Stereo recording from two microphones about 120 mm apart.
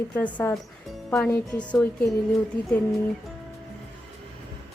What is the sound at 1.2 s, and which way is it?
Speech, 15° left (ahead or behind).